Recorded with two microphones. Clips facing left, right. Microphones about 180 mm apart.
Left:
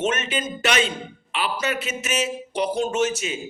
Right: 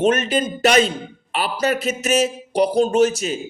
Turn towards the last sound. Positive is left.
turn(degrees=-40)  # may be behind; listen again after turning